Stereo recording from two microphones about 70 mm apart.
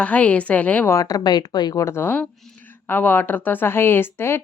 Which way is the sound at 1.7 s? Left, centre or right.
Left.